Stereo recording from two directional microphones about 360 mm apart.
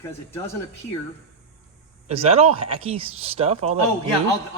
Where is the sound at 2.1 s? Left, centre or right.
Centre.